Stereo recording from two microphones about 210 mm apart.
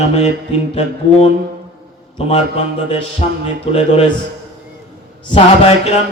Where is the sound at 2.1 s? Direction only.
30° left (ahead or behind).